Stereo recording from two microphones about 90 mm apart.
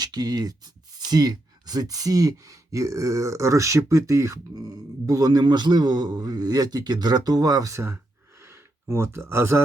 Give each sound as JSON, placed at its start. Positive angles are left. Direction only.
{"t": 0.0, "sound": "speech", "side_deg": -50}
{"t": 8.4, "sound": "gasp", "side_deg": -30}